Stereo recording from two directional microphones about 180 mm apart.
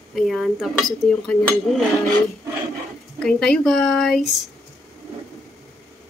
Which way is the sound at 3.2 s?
5° left (ahead or behind).